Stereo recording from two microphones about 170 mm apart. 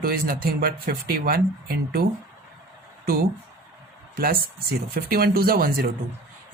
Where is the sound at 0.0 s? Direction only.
60° right (ahead or behind).